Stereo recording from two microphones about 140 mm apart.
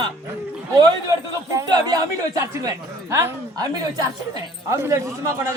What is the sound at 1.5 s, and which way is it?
A woman's voice, 25° right (ahead or behind).